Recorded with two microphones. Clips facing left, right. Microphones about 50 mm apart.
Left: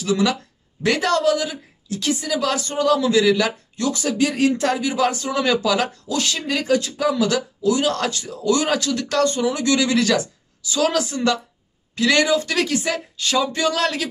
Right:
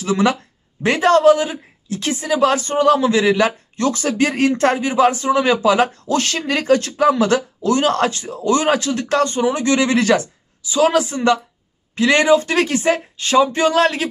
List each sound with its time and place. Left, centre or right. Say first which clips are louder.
0.0 s a man's voice: right 3 dB; right